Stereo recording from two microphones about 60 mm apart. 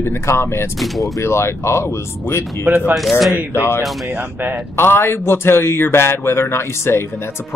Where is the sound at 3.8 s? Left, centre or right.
Centre.